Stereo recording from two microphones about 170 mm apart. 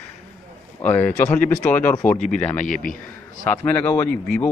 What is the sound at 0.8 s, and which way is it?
Speech, 10° left (ahead or behind).